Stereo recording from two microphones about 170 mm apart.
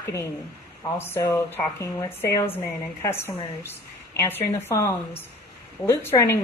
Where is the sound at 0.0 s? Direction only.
15° left (ahead or behind).